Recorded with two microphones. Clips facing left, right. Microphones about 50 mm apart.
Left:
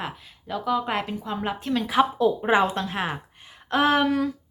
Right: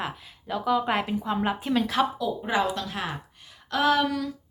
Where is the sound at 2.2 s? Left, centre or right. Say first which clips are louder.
Left 6 dB; left.